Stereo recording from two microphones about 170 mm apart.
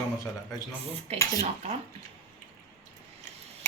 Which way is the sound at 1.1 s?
35° right (ahead or behind).